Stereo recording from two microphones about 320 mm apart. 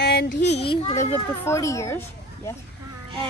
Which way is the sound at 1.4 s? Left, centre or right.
Centre.